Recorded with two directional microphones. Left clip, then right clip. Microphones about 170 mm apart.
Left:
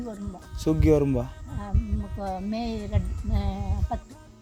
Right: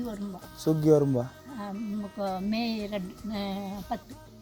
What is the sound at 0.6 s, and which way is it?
Speech, 50° left (ahead or behind).